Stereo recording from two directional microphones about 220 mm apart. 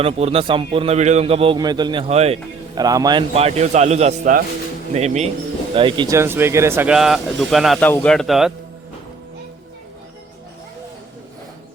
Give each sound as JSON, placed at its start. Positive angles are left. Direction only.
{"t": 0.0, "sound": "a man's voice", "side_deg": -30}
{"t": 2.7, "sound": "a man's voice", "side_deg": -15}